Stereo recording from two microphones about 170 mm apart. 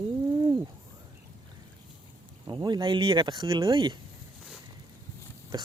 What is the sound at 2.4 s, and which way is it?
Speech, 25° right (ahead or behind).